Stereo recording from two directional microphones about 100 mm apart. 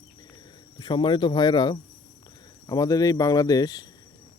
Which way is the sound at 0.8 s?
55° left (ahead or behind).